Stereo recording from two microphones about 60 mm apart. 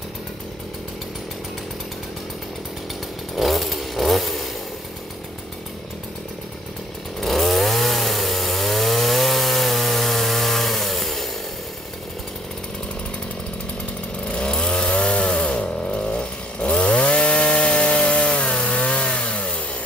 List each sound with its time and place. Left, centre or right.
3.3 s chainsaw: centre
7.2 s chainsaw: centre
14.2 s chainsaw: centre